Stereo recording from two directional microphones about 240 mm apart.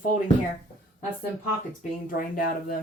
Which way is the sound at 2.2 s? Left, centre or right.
Left.